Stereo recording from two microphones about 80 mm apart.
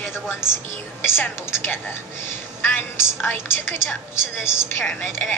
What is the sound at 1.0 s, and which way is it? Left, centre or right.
A woman's voice, left.